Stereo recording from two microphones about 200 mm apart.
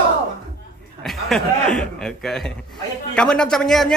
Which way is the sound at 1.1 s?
Centre (ahead or behind).